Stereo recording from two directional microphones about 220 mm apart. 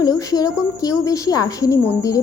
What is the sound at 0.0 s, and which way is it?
Speech, 15° left (ahead or behind).